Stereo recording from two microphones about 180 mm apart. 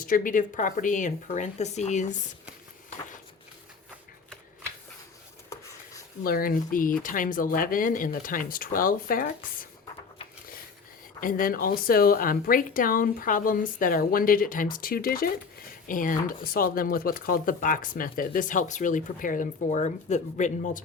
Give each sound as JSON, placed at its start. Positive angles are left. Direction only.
{"t": 0.0, "sound": "speech", "side_deg": 50}
{"t": 6.2, "sound": "speech", "side_deg": 55}
{"t": 11.2, "sound": "speech", "side_deg": 50}